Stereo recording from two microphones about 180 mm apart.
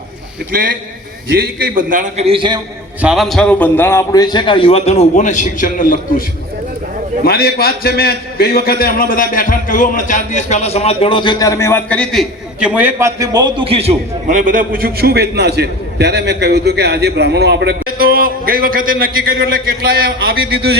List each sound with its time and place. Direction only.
1.4 s a man's voice: 55° right (ahead or behind); by 2.6 s 30° right (ahead or behind)
3.0 s a man's voice: 5° right (ahead or behind); by 6.2 s 50° left (ahead or behind)
7.3 s a man's voice: 60° left (ahead or behind); by 20.7 s 60° right (ahead or behind)